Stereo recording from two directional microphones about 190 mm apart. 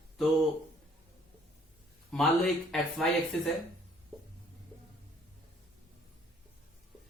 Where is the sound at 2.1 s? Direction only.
Centre (ahead or behind).